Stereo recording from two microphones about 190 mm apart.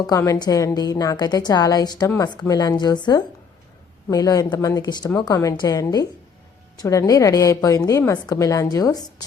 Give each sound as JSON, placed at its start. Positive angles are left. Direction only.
{"t": 0.1, "sound": "a woman's voice", "side_deg": 20}